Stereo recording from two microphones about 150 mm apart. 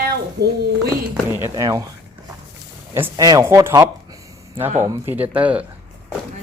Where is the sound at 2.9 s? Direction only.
20° right (ahead or behind).